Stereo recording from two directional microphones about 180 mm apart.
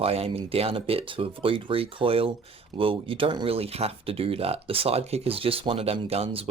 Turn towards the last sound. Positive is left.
turn(degrees=-35)  # may be behind; listen again after turning